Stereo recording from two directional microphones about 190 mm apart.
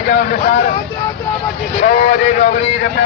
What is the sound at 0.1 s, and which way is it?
Speech, 50° left (ahead or behind).